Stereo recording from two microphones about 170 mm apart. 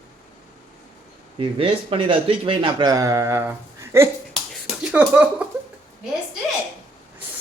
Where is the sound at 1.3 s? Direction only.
30° right (ahead or behind); by 4.1 s 15° right (ahead or behind).